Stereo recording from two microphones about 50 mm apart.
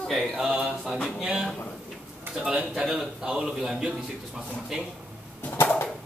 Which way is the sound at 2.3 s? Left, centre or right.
Right.